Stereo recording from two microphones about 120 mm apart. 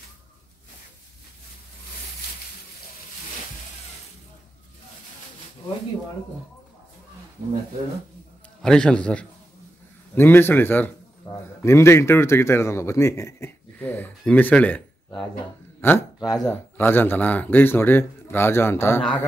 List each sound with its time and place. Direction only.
8.6 s a man's voice: 5° left (ahead or behind)
16.2 s speech: 35° left (ahead or behind)
16.4 s a man's voice: 15° left (ahead or behind)